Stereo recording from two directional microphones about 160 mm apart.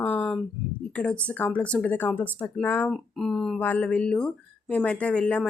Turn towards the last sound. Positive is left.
turn(degrees=5)  # may be behind; listen again after turning